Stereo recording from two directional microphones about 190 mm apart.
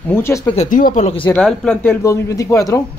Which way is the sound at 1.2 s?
5° left (ahead or behind).